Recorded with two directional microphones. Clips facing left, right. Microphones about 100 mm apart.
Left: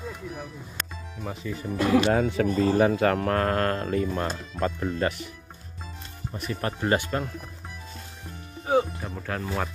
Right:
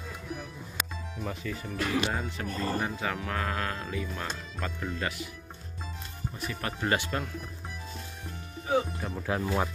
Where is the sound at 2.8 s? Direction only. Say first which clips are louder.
Left 11 dB; 65° left (ahead or behind); by 5.1 s 35° left (ahead or behind).